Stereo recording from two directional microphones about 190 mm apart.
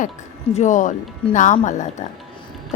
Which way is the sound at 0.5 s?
40° left (ahead or behind).